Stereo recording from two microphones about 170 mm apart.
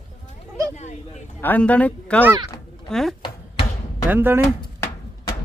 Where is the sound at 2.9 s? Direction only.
Centre (ahead or behind).